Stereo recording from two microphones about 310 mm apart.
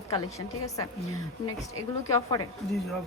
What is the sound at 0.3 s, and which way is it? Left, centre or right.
Speech, centre.